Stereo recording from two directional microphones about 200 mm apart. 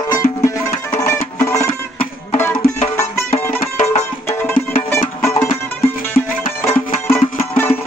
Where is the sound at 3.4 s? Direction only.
35° left (ahead or behind).